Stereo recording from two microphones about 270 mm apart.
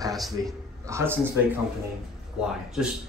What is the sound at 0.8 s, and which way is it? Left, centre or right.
Speech, centre.